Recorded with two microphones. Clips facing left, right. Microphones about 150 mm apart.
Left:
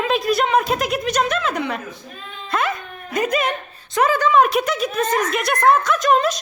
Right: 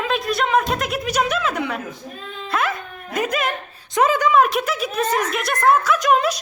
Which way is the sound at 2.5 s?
5° right (ahead or behind).